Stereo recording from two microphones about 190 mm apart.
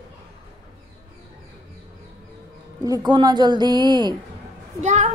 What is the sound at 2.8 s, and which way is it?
A woman's voice, 20° right (ahead or behind).